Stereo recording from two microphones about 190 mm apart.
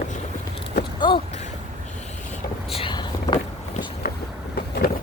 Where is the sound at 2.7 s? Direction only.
25° left (ahead or behind).